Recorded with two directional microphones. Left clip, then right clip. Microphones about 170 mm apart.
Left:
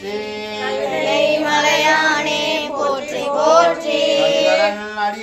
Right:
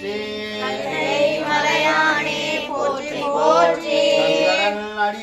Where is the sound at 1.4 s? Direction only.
60° left (ahead or behind).